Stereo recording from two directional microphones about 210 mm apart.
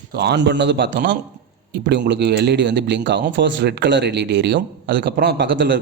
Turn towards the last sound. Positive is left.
turn(degrees=-60)  # may be behind; listen again after turning